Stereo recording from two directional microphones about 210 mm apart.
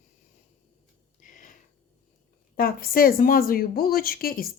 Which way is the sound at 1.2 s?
40° left (ahead or behind).